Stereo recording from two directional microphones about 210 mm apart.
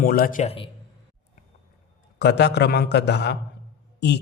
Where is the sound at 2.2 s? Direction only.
55° left (ahead or behind).